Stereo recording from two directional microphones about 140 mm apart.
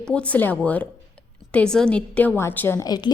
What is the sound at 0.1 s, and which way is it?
A woman's voice, 10° left (ahead or behind).